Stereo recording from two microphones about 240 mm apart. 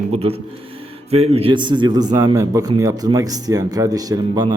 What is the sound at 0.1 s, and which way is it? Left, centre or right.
A man's voice, right.